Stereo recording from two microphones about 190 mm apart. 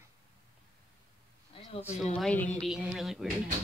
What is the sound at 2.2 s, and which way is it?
Speech, 5° left (ahead or behind).